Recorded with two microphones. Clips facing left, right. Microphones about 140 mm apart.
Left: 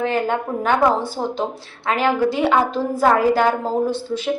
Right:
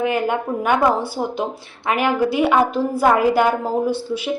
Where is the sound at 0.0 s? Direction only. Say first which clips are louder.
Right 1 dB; 15° right (ahead or behind).